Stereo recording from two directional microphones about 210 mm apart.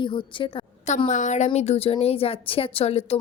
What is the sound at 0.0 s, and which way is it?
Speech, 25° left (ahead or behind).